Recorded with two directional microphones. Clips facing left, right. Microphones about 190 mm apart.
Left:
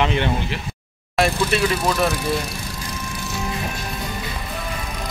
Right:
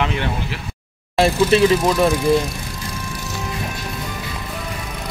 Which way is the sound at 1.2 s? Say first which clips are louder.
Right 5 dB; 30° right (ahead or behind).